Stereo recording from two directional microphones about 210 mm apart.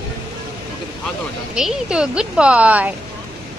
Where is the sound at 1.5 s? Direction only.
5° right (ahead or behind).